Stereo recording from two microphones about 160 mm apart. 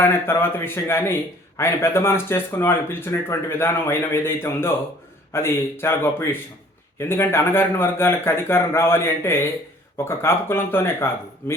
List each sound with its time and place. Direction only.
0.0 s a man's voice: 15° left (ahead or behind)